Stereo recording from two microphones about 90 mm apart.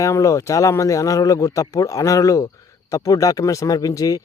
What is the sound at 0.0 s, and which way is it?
Speech, 35° left (ahead or behind).